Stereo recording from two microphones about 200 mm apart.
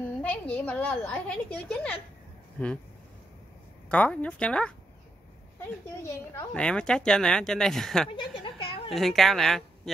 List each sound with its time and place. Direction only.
0.2 s a woman's voice: 10° left (ahead or behind)
3.9 s a woman's voice: 5° left (ahead or behind)
6.0 s a woman's voice: 10° left (ahead or behind)
8.2 s a sound: 25° left (ahead or behind)
8.9 s a woman's voice: centre (ahead or behind)